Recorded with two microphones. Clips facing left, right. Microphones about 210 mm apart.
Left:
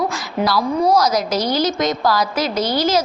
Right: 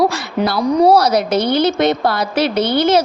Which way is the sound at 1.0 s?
60° right (ahead or behind).